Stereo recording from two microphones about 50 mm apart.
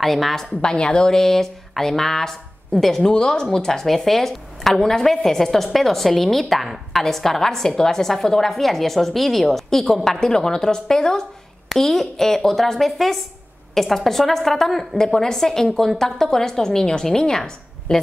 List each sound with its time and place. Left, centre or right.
0.0 s speech: centre
0.6 s speech: centre